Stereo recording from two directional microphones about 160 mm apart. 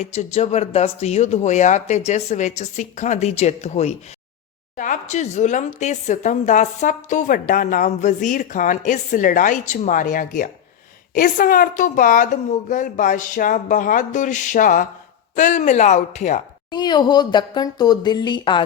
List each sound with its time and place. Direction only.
0.0 s a woman's voice: 45° left (ahead or behind)
16.7 s speech: 25° left (ahead or behind)